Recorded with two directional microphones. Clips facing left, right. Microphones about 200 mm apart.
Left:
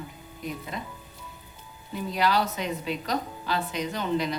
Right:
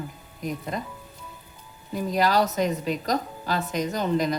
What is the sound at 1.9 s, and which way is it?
A woman's voice, 45° right (ahead or behind).